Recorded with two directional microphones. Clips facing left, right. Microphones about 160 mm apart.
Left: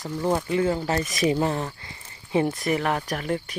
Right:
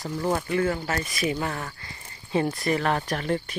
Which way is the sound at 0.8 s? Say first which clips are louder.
Left 4 dB; 35° left (ahead or behind).